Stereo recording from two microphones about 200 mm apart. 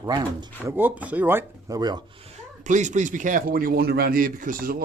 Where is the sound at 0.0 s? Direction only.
20° right (ahead or behind).